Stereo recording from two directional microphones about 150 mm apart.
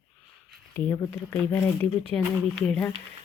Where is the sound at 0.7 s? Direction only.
20° left (ahead or behind).